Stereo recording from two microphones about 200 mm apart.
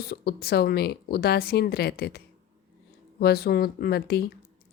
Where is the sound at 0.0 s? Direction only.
50° left (ahead or behind).